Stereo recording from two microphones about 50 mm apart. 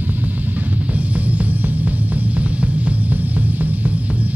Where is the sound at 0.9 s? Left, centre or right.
Right.